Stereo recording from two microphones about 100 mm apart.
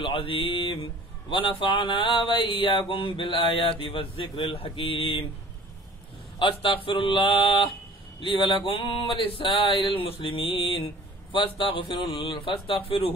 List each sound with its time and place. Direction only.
0.0 s speech: 65° left (ahead or behind)
6.4 s speech: 60° left (ahead or behind)
11.3 s speech: 55° left (ahead or behind)